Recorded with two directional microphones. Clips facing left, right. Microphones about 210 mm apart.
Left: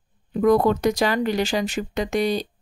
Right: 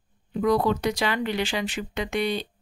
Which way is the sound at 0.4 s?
50° left (ahead or behind).